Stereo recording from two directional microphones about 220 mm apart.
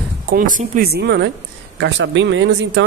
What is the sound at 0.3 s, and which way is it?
Speech, 45° right (ahead or behind).